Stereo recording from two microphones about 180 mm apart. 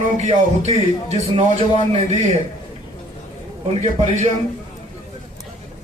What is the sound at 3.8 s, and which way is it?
Speech, 35° right (ahead or behind).